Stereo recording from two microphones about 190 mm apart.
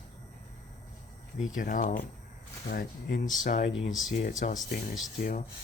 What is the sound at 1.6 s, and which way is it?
Speech, 45° left (ahead or behind).